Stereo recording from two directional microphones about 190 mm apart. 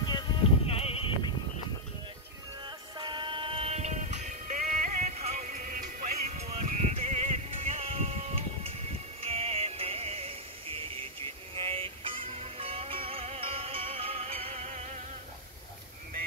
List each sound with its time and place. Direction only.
0.0 s bleat: 25° left (ahead or behind)
3.0 s music: 25° right (ahead or behind)